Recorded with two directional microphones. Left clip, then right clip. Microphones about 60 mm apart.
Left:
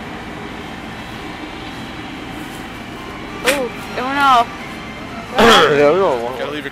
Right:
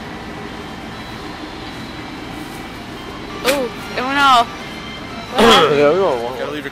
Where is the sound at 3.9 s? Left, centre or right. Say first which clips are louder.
Right 1 dB; right.